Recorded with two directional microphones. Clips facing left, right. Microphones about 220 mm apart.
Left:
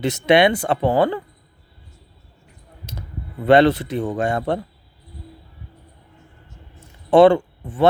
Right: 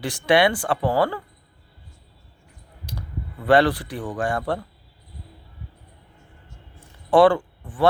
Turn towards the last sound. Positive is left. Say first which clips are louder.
# left 3 dB
turn(degrees=25)  # may be behind; listen again after turning